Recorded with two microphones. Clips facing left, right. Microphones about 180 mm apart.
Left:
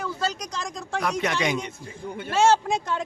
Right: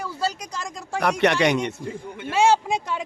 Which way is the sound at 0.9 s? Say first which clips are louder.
Right 6 dB; 65° right (ahead or behind).